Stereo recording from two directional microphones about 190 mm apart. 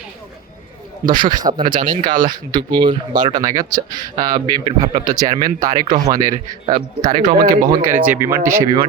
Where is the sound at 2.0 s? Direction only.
45° right (ahead or behind).